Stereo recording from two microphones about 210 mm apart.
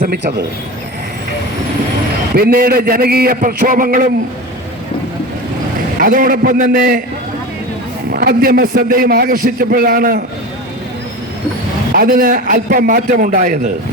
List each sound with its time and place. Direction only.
0.0 s a man's voice: 45° right (ahead or behind)
2.3 s a man's voice: 45° right (ahead or behind)
6.0 s a man's voice: 40° right (ahead or behind)
8.1 s a man's voice: 45° right (ahead or behind)
11.9 s a man's voice: 45° right (ahead or behind)